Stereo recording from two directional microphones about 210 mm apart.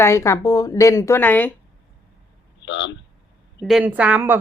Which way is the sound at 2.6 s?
60° left (ahead or behind).